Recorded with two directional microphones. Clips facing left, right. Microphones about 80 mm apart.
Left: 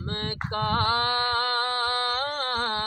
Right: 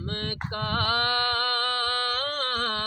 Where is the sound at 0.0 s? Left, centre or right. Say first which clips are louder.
Left 1 dB; left.